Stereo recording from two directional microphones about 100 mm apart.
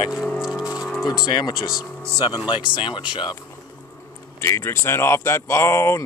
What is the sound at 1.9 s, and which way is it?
Speech, 10° left (ahead or behind).